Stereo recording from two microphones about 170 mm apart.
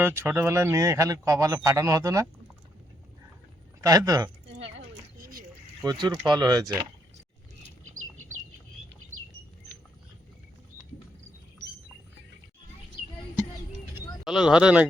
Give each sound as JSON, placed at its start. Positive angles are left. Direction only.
{"t": 0.0, "sound": "a man's voice", "side_deg": -15}
{"t": 3.8, "sound": "a man's voice", "side_deg": -20}
{"t": 4.4, "sound": "a sound", "side_deg": -90}
{"t": 5.2, "sound": "a sound", "side_deg": -55}
{"t": 5.8, "sound": "a man's voice", "side_deg": -20}
{"t": 14.3, "sound": "speech", "side_deg": -5}